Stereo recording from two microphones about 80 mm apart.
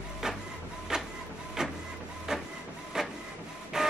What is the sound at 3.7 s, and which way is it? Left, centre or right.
Music, centre.